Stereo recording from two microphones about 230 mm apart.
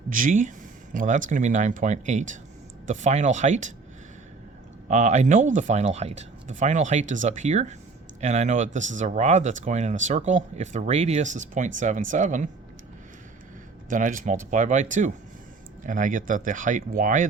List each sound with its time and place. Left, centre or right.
0.1 s speech: right
4.9 s speech: right
13.9 s speech: right